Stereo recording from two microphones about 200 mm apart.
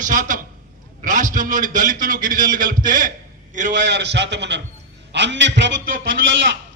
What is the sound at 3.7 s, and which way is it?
A man's voice, 60° right (ahead or behind).